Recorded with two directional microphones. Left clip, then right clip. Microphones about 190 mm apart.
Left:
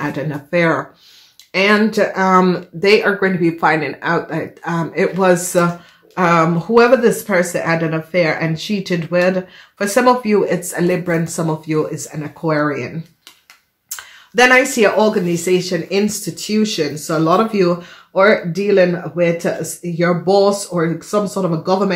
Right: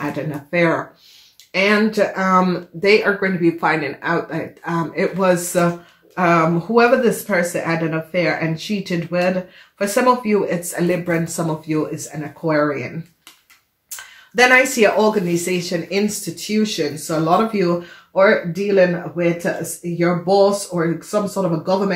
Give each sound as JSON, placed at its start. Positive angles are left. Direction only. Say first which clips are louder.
{"t": 0.0, "sound": "a woman's voice", "louder": "left 2 dB", "side_deg": 40}
{"t": 13.8, "sound": "speech", "louder": "left 3 dB", "side_deg": 45}